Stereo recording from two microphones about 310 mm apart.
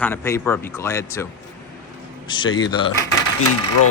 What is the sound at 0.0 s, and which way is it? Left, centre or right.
Speech, centre.